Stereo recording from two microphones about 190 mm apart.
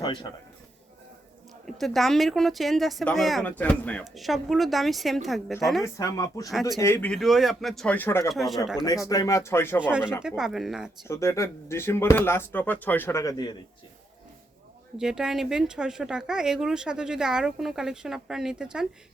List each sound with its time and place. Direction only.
0.0 s speech: 25° left (ahead or behind)
1.6 s speech: centre (ahead or behind)
5.8 s speech: 15° left (ahead or behind)
8.3 s speech: centre (ahead or behind)
8.8 s speech: 20° left (ahead or behind)
9.8 s speech: 5° right (ahead or behind)
11.1 s speech: 15° left (ahead or behind)
14.9 s speech: 5° right (ahead or behind)